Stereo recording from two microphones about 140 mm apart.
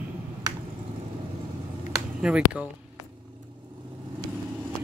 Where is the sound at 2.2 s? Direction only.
5° right (ahead or behind).